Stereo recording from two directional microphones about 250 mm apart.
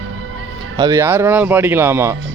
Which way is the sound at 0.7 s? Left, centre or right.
Centre.